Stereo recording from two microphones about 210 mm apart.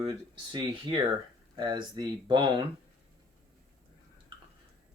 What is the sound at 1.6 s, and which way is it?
Speech, 20° right (ahead or behind).